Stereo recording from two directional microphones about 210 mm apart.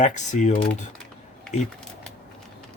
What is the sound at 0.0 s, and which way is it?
Speech, 35° left (ahead or behind).